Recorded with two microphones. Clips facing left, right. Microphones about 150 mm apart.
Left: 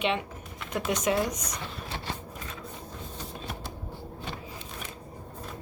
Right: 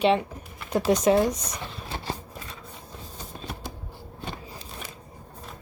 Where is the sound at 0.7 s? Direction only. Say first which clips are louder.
Right 7 dB; 35° right (ahead or behind).